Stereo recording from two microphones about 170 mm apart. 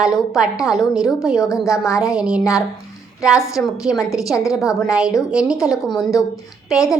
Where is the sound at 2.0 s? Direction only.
5° right (ahead or behind).